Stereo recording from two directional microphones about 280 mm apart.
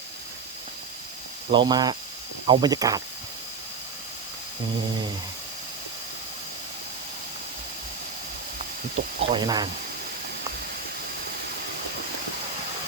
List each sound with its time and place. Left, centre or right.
1.5 s speech: centre
9.0 s speech: centre